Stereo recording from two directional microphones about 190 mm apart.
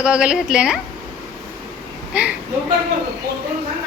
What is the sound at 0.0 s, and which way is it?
Speech, 5° right (ahead or behind).